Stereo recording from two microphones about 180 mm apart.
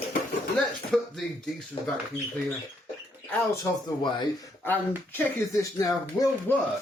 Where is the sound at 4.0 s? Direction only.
25° left (ahead or behind).